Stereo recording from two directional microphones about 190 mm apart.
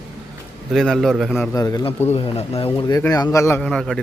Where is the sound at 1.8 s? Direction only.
35° left (ahead or behind).